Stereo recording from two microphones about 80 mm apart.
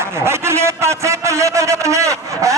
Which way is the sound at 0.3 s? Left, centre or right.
Right.